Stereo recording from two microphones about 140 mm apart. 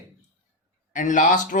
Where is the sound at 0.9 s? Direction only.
65° left (ahead or behind).